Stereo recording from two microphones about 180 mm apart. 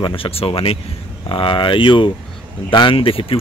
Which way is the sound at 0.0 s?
30° left (ahead or behind).